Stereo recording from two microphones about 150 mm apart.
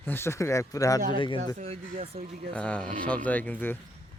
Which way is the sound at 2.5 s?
10° left (ahead or behind).